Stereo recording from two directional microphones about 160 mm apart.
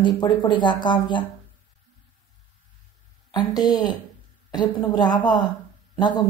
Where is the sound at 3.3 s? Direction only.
25° left (ahead or behind).